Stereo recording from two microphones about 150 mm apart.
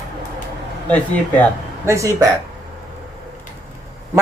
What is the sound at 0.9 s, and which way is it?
Speech, 10° left (ahead or behind).